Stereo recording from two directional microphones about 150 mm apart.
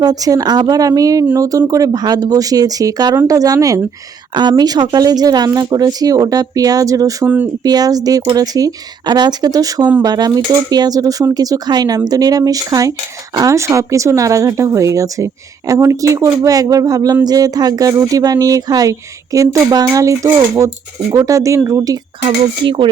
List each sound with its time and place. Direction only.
0.0 s speech: 25° right (ahead or behind)
7.3 s speech: 10° right (ahead or behind)
7.6 s speech: 25° right (ahead or behind)
22.6 s a sound: 35° right (ahead or behind)